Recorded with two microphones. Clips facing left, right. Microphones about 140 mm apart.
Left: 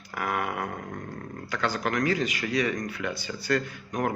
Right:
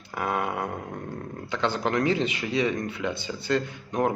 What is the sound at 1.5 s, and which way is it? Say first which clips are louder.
Speech: right 2 dB; 25° right (ahead or behind).